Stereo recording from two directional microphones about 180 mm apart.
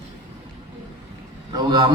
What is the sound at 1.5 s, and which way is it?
Speech, 20° right (ahead or behind).